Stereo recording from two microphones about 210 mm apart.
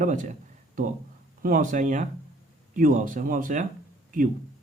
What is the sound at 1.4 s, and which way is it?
Speech, 40° right (ahead or behind).